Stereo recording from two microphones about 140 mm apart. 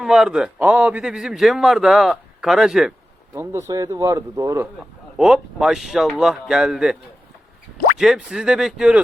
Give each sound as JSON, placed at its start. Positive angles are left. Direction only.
{"t": 0.0, "sound": "a man's voice", "side_deg": -5}
{"t": 3.3, "sound": "speech", "side_deg": -20}
{"t": 4.6, "sound": "a man's voice", "side_deg": -5}
{"t": 7.9, "sound": "a man's voice", "side_deg": -5}